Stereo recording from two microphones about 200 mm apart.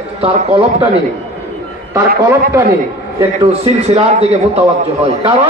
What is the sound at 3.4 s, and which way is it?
A man's voice, 30° right (ahead or behind).